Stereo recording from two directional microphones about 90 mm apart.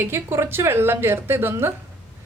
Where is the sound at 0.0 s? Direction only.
25° right (ahead or behind).